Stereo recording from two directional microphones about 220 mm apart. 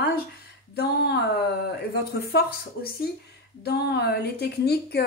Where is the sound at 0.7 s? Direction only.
50° left (ahead or behind).